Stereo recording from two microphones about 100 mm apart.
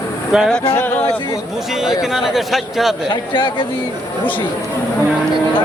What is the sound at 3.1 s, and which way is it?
Speech, 55° left (ahead or behind).